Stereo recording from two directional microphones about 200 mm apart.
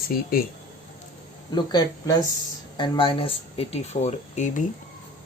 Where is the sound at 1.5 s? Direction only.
20° left (ahead or behind).